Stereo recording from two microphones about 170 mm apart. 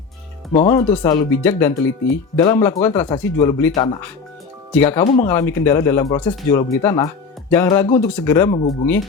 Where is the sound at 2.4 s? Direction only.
25° left (ahead or behind).